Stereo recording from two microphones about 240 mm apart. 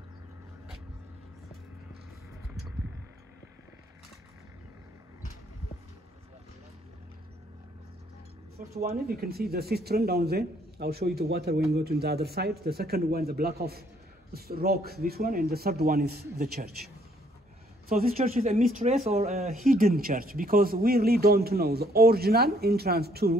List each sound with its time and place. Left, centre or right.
8.5 s speech: right
18.1 s speech: right